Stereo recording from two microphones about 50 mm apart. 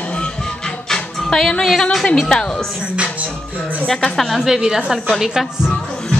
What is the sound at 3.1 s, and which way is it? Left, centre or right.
Music, right.